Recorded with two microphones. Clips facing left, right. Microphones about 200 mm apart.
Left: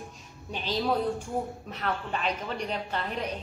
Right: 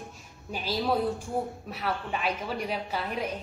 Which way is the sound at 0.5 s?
5° right (ahead or behind).